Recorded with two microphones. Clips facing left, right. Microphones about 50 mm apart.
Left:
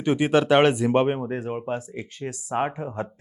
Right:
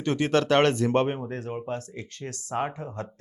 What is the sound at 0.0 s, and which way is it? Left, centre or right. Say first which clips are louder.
Speech: left 3 dB; centre.